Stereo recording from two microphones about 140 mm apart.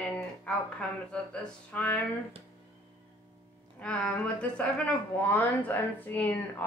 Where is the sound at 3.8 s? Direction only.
10° left (ahead or behind).